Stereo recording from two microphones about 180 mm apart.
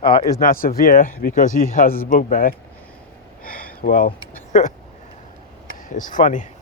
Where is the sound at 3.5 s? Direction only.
50° left (ahead or behind).